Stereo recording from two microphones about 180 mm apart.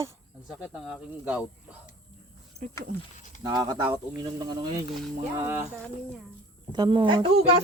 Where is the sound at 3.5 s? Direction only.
20° right (ahead or behind).